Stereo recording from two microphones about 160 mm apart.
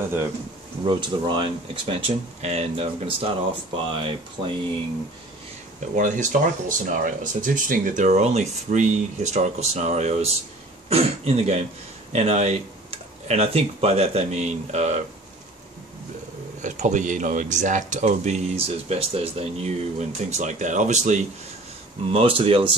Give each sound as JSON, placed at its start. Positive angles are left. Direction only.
{"t": 0.8, "sound": "speech", "side_deg": -30}
{"t": 5.8, "sound": "speech", "side_deg": -50}
{"t": 16.6, "sound": "speech", "side_deg": -50}
{"t": 22.1, "sound": "speech", "side_deg": -35}